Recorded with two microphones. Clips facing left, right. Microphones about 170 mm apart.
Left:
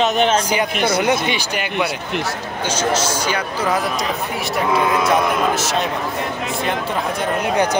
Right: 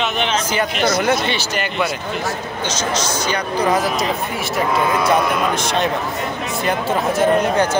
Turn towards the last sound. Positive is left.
turn(degrees=0)  # may be behind; listen again after turning